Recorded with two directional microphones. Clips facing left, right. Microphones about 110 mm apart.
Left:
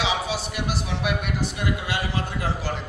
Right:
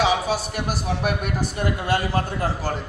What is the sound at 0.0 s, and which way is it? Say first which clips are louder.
A man's voice: right 5 dB; 45° right (ahead or behind).